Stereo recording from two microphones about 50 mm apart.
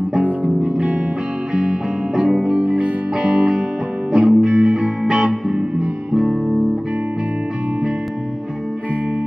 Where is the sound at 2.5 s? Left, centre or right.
Right.